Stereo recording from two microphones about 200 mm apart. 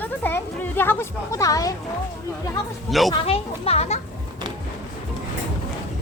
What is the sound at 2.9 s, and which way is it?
Speech, centre (ahead or behind).